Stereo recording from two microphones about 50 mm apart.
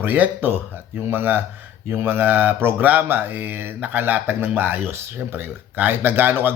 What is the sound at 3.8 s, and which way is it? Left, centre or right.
Speech, right.